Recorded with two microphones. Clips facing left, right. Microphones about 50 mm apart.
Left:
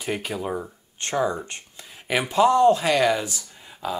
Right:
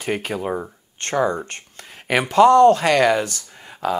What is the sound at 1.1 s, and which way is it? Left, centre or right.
Speech, right.